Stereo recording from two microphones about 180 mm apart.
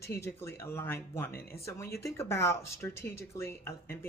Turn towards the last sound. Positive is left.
turn(degrees=15)  # may be behind; listen again after turning